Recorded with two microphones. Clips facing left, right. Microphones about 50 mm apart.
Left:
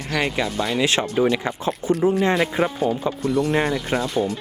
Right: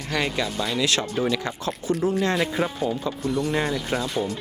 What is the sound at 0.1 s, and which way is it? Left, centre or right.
Speech, centre.